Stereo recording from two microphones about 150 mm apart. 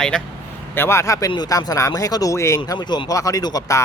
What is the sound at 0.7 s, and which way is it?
Speech, 15° left (ahead or behind).